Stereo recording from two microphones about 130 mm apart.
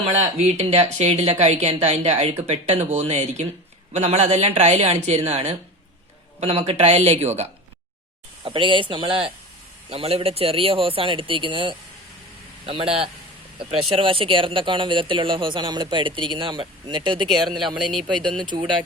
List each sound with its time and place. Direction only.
0.0 s speech: 55° right (ahead or behind)
6.4 s speech: 55° right (ahead or behind)
8.4 s a man's voice: 40° right (ahead or behind)